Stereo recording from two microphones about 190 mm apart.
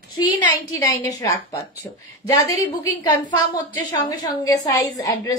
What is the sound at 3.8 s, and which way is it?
A woman's voice, 20° left (ahead or behind).